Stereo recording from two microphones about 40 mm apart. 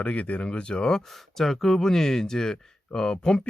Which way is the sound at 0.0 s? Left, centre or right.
Left.